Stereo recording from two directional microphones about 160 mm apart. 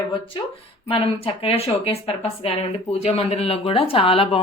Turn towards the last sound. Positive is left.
turn(degrees=35)  # may be behind; listen again after turning